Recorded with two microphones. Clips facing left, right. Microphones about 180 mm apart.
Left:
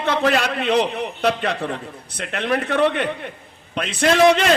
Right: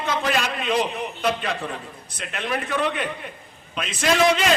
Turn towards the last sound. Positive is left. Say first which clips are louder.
# left 5 dB
turn(degrees=65)  # may be behind; listen again after turning